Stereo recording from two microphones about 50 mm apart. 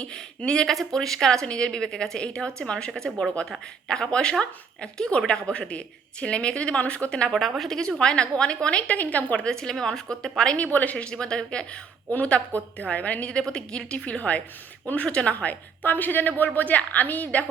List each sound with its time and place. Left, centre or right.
0.0 s a woman's voice: left
7.3 s speech: centre
7.8 s speech: centre
9.5 s a woman's voice: centre
10.6 s a woman's voice: left
11.0 s a woman's voice: centre
12.1 s speech: left
13.3 s speech: centre
15.8 s a woman's voice: left